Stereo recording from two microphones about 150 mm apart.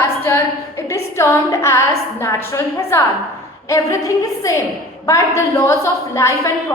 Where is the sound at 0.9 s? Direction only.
20° left (ahead or behind).